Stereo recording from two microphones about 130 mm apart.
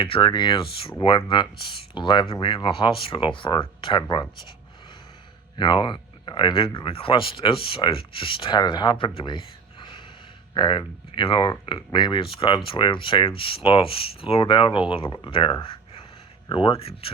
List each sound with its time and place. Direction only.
0.0 s speech: 40° left (ahead or behind)
5.5 s speech: 35° left (ahead or behind)